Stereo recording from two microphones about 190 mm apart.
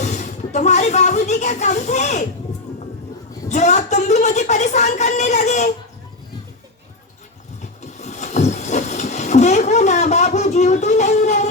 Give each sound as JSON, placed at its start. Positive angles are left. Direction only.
{"t": 0.0, "sound": "speech", "side_deg": 40}
{"t": 3.5, "sound": "a woman's voice", "side_deg": 40}
{"t": 7.6, "sound": "a sound", "side_deg": 40}